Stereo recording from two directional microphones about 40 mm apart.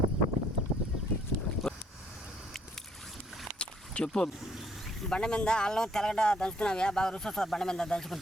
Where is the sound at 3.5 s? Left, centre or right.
Left.